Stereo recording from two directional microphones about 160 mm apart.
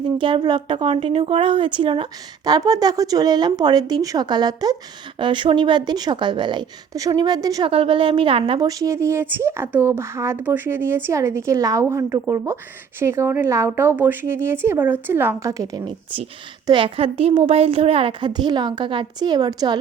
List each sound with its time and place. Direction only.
0.2 s a woman's voice: 30° right (ahead or behind)
7.7 s a woman's voice: 35° right (ahead or behind)
8.6 s a woman's voice: 20° right (ahead or behind)
16.6 s a woman's voice: 35° right (ahead or behind)